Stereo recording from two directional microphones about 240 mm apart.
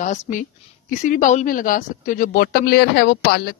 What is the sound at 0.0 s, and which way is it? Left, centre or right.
A woman's voice, left.